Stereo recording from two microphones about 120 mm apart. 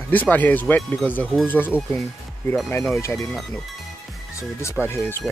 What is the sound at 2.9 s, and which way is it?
Speech, 25° left (ahead or behind).